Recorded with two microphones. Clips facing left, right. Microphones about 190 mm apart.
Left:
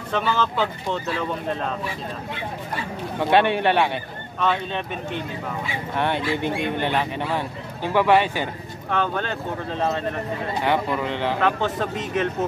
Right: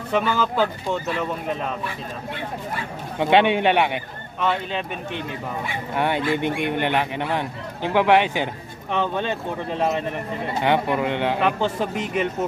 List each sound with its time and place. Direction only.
0.1 s speech: 10° right (ahead or behind)
3.2 s speech: 15° right (ahead or behind)